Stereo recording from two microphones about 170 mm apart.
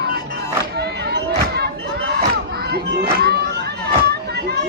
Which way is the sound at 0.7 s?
80° right.